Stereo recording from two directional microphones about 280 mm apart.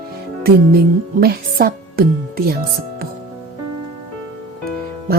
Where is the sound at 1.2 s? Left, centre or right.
Right.